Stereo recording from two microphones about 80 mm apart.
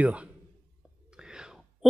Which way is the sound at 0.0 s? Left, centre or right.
Centre.